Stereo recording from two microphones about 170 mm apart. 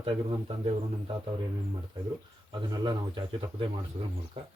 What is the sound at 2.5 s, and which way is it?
Speech, 25° right (ahead or behind).